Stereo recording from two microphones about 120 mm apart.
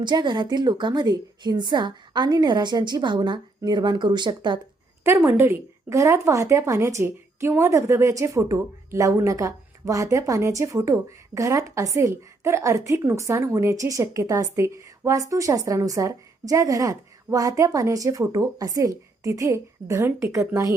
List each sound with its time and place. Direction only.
0.0 s a woman's voice: 40° right (ahead or behind)
5.0 s a woman's voice: 20° right (ahead or behind)